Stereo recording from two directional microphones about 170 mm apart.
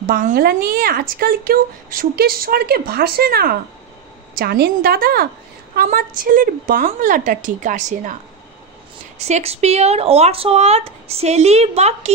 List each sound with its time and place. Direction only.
0.0 s a woman's voice: 50° right (ahead or behind)
9.2 s speech: 40° right (ahead or behind)